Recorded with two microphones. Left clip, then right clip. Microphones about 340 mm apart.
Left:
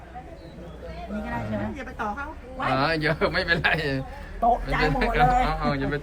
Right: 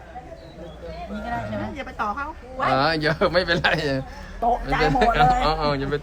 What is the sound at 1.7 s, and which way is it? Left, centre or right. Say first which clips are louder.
Speech: right 4 dB; right.